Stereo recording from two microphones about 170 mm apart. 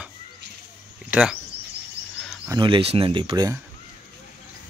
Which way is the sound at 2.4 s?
25° right (ahead or behind).